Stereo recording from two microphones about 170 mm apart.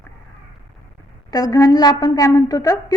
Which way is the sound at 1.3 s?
20° left (ahead or behind).